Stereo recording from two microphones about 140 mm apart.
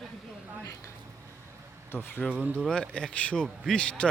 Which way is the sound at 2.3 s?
15° right (ahead or behind).